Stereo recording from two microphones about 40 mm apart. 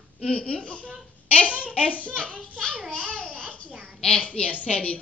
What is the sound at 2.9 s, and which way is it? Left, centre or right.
Babbling, left.